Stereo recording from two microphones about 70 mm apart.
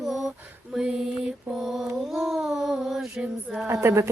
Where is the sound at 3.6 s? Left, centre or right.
Right.